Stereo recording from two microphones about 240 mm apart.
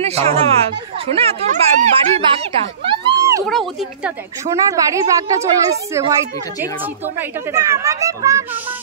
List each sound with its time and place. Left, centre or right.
0.0 s speech: right
2.9 s a sound: centre
3.4 s speech: centre
4.6 s a woman's voice: centre
7.2 s a woman's voice: centre